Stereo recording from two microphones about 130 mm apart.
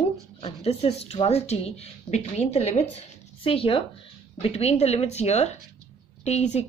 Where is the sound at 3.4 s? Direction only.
45° left (ahead or behind).